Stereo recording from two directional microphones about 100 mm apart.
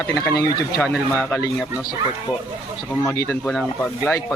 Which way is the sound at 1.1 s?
25° left (ahead or behind).